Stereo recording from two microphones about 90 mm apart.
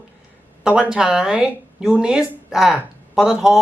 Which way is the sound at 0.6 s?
10° right (ahead or behind).